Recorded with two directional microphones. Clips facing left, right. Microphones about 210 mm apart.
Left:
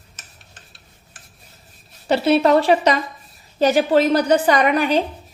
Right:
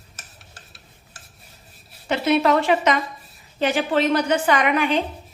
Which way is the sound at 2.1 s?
35° left (ahead or behind).